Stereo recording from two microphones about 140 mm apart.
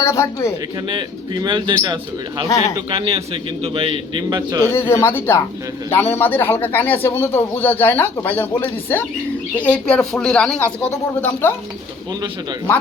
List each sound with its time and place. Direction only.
0.0 s speech: 20° left (ahead or behind)
0.9 s a man's voice: 35° right (ahead or behind)
4.6 s speech: 15° left (ahead or behind)